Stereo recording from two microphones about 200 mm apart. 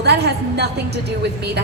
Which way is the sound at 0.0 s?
55° right (ahead or behind).